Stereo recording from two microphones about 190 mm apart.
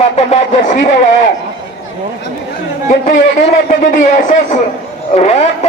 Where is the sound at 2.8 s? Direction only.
45° left (ahead or behind).